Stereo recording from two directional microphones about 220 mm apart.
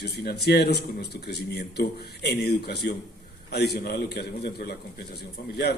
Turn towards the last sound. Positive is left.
turn(degrees=50)  # may be behind; listen again after turning